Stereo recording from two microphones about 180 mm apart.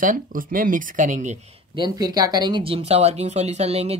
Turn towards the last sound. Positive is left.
turn(degrees=-35)  # may be behind; listen again after turning